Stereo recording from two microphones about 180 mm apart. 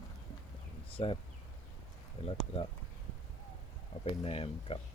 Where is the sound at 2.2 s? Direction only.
30° left (ahead or behind).